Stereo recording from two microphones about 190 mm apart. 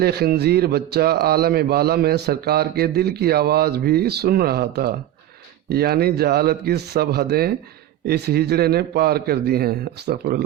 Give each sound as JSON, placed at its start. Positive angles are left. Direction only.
{"t": 0.0, "sound": "speech", "side_deg": -55}